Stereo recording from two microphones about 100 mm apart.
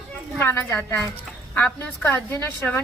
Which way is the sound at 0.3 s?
20° left (ahead or behind).